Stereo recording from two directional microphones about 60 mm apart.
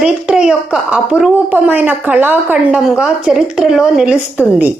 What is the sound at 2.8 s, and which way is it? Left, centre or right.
Speech, centre.